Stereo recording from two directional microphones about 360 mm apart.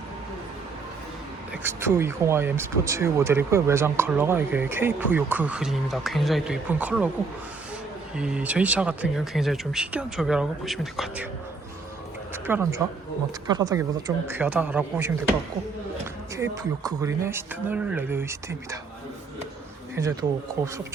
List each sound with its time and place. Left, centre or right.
1.6 s speech: centre
8.1 s speech: centre
12.3 s speech: centre
16.3 s speech: centre
20.0 s speech: centre